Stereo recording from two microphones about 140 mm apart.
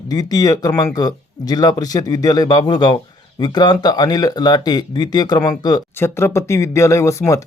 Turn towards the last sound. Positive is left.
turn(degrees=20)  # may be behind; listen again after turning